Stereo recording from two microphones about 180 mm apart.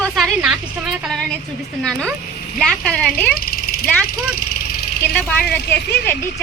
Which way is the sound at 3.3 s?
55° left (ahead or behind).